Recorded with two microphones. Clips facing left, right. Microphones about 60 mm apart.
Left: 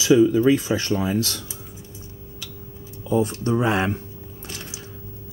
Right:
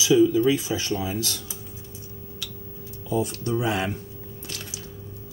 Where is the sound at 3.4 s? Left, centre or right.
Left.